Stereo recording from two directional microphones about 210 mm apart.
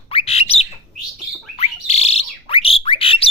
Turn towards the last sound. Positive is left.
turn(degrees=25)  # may be behind; listen again after turning